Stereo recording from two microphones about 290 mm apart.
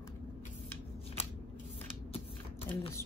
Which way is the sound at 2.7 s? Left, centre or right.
Centre.